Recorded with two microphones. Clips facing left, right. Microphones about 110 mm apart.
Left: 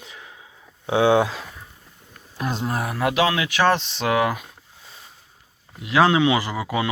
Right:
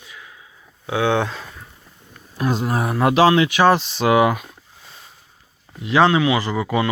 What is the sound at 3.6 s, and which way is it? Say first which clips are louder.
Speech: right 4 dB; 5° right (ahead or behind).